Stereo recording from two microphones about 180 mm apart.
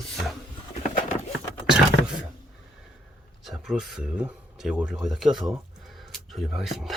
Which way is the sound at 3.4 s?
Centre (ahead or behind).